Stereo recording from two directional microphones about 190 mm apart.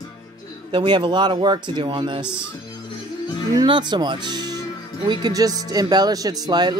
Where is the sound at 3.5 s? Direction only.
25° right (ahead or behind).